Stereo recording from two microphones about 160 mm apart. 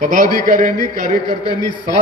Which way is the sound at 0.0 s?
55° right (ahead or behind).